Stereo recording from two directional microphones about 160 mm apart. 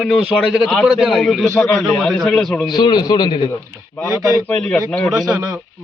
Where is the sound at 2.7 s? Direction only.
25° left (ahead or behind).